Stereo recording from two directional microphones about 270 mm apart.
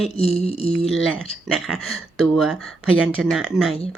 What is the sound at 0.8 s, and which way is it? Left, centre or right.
Speech, centre.